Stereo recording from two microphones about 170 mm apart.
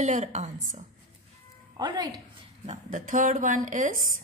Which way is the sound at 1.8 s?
25° right (ahead or behind).